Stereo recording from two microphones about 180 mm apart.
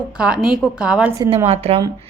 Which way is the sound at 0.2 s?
5° right (ahead or behind).